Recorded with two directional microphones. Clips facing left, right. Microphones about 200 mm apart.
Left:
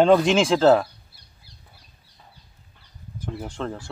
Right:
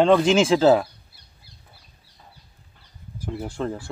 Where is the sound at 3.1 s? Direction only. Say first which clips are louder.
Right 2 dB; 10° right (ahead or behind).